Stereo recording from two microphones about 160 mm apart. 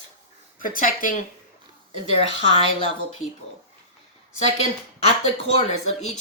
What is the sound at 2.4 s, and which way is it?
Speech, 35° left (ahead or behind).